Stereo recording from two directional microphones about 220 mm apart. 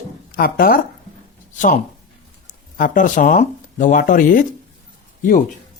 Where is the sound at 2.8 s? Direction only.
35° left (ahead or behind).